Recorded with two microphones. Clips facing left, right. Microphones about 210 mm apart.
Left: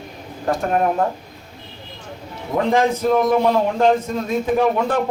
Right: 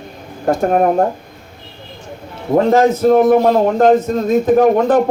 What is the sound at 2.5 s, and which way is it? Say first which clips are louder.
Speech: right 6 dB; 45° right (ahead or behind).